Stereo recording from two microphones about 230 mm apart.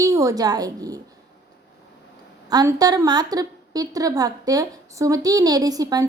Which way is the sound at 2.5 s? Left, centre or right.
Centre.